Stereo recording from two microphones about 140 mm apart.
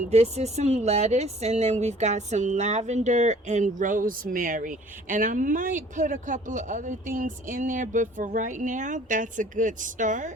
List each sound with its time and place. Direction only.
0.1 s speech: 50° right (ahead or behind)